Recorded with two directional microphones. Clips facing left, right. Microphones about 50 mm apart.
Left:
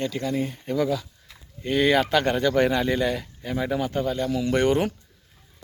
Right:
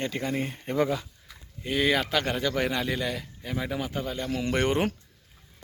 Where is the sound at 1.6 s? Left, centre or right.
Centre.